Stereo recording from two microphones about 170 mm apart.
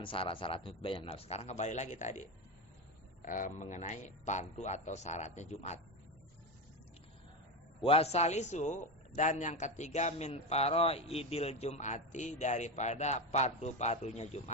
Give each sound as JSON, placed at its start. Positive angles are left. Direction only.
{"t": 0.0, "sound": "a man's voice", "side_deg": 30}
{"t": 7.8, "sound": "a man's voice", "side_deg": 35}